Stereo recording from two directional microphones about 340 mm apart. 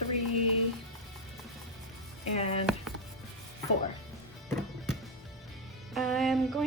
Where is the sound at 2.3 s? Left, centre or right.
Centre.